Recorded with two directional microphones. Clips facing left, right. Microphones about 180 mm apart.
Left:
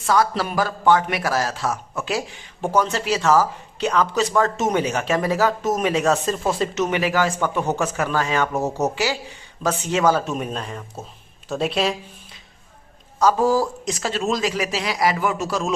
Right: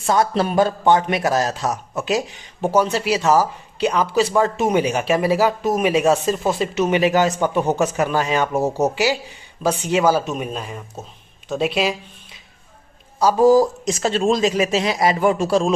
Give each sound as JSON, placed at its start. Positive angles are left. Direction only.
{"t": 0.0, "sound": "a man's voice", "side_deg": -25}
{"t": 6.3, "sound": "speech", "side_deg": 0}
{"t": 6.6, "sound": "a man's voice", "side_deg": -15}
{"t": 13.1, "sound": "speech", "side_deg": -15}